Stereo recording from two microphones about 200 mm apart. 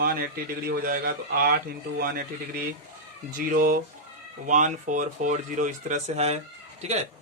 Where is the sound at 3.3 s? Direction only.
45° right (ahead or behind).